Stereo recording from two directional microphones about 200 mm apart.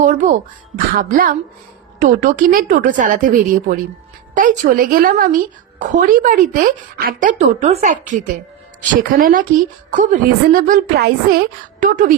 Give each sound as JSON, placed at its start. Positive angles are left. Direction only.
{"t": 0.0, "sound": "a woman's voice", "side_deg": -40}